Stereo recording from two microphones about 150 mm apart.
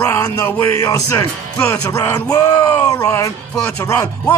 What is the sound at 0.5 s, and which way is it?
Speech, 15° left (ahead or behind).